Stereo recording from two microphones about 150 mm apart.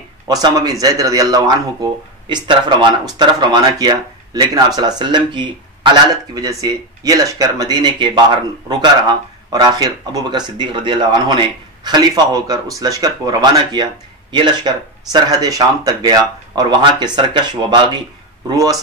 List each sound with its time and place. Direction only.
0.3 s speech: 25° right (ahead or behind)